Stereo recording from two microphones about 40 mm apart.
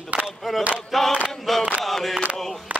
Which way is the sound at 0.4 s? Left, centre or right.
Centre.